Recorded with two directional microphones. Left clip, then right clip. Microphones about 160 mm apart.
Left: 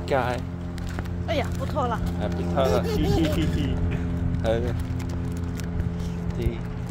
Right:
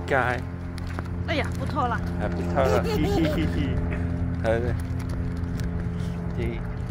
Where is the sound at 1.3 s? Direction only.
80° left.